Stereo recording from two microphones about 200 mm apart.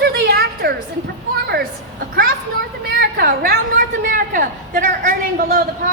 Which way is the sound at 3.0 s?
50° right (ahead or behind).